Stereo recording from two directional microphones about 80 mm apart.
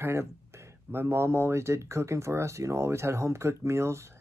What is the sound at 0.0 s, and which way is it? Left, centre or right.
Speech, right.